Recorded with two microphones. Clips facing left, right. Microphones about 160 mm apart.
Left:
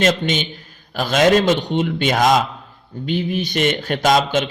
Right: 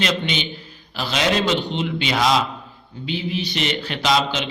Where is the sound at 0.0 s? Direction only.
45° left (ahead or behind).